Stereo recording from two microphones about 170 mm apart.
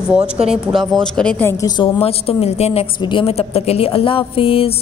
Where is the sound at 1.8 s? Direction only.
35° left (ahead or behind).